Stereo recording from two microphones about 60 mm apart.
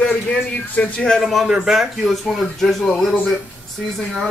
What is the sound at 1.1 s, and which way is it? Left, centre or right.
Speech, centre.